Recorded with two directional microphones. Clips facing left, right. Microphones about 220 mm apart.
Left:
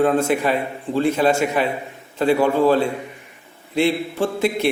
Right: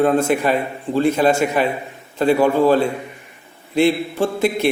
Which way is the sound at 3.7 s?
45° right (ahead or behind).